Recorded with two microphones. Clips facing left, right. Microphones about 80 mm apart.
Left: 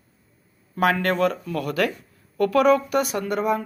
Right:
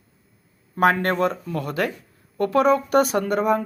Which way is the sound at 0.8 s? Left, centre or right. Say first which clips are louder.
Right 1 dB; right.